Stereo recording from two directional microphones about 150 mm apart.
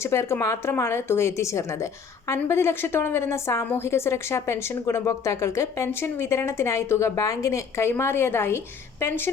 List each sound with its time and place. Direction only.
0.0 s a woman's voice: 20° left (ahead or behind)